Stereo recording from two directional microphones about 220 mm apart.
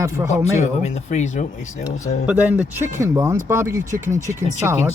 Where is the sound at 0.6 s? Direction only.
30° left (ahead or behind).